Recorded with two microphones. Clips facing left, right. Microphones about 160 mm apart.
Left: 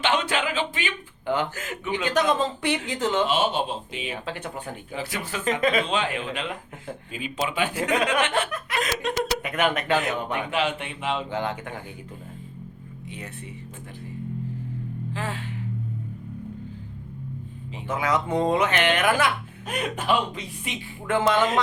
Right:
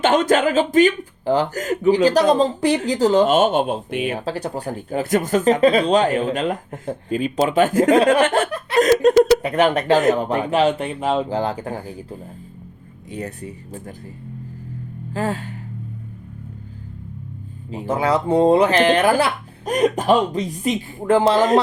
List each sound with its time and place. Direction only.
0.0 s speech: 45° right (ahead or behind)
3.2 s speech: 50° right (ahead or behind)
4.3 s speech: 35° right (ahead or behind)
4.9 s speech: 50° right (ahead or behind)
13.1 s speech: 40° right (ahead or behind)
15.1 s speech: 40° right (ahead or behind)
17.7 s speech: 35° right (ahead or behind)